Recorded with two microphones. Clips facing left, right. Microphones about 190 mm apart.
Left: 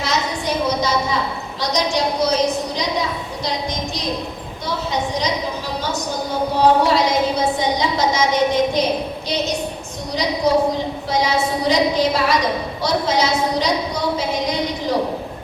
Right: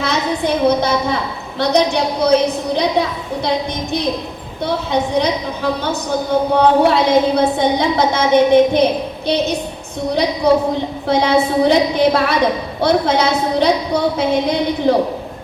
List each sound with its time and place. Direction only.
0.0 s a sound: 60° right (ahead or behind)
1.5 s a woman's voice: 60° right (ahead or behind)
4.6 s a woman's voice: 60° right (ahead or behind)
10.5 s a woman's voice: 60° right (ahead or behind)